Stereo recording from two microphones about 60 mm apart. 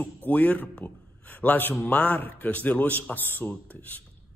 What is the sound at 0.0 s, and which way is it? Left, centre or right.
A man's voice, left.